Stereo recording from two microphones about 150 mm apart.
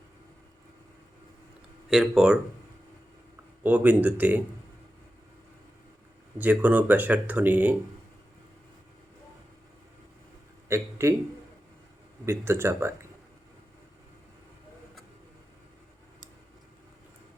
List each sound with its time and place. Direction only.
1.9 s speech: 5° right (ahead or behind)
3.6 s speech: 10° right (ahead or behind)
6.4 s speech: 10° right (ahead or behind)
10.7 s a man's voice: 15° right (ahead or behind)
12.2 s speech: 15° right (ahead or behind)